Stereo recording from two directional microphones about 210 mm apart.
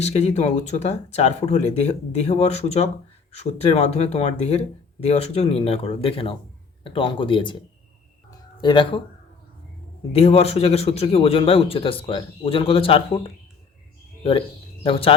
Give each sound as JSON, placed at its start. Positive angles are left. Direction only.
{"t": 0.0, "sound": "a man's voice", "side_deg": 30}
{"t": 8.3, "sound": "music", "side_deg": 20}
{"t": 10.1, "sound": "a man's voice", "side_deg": 30}
{"t": 14.8, "sound": "a man's voice", "side_deg": 25}